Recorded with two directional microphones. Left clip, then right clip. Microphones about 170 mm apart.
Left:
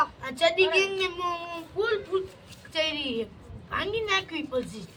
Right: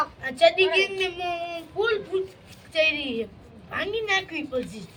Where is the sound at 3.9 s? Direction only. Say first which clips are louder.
Right 3 dB; 15° left (ahead or behind).